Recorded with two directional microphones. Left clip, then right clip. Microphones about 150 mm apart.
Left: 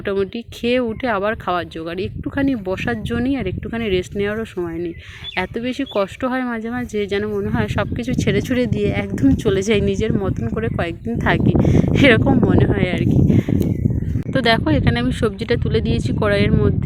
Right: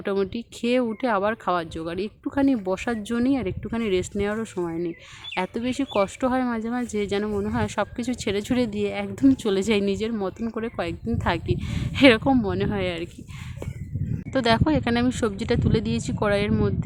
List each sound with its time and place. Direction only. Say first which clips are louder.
0.0 s speech: left 4 dB; 5° left (ahead or behind)